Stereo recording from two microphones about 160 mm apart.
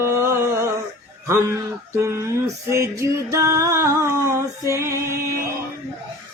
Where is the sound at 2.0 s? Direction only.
15° right (ahead or behind).